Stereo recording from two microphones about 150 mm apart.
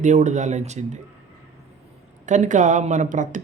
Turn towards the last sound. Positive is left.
turn(degrees=-55)  # may be behind; listen again after turning